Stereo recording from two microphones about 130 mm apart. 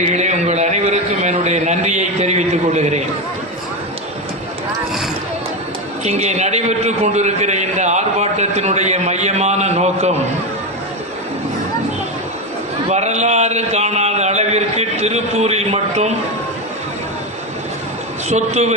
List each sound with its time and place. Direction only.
0.0 s a sound: 60° right (ahead or behind)
6.1 s a man's voice: 60° right (ahead or behind)
12.9 s a man's voice: 60° right (ahead or behind)
18.3 s a man's voice: 60° right (ahead or behind)